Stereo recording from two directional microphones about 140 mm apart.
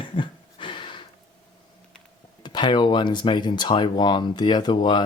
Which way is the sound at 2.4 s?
30° left (ahead or behind).